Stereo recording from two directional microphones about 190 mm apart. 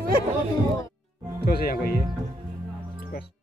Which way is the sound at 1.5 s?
55° left (ahead or behind).